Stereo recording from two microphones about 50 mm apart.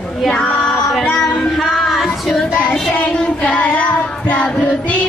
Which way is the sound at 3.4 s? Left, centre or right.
Left.